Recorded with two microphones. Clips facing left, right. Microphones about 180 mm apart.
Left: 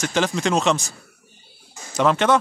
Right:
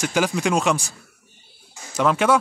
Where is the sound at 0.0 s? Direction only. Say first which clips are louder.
Even; 10° right (ahead or behind).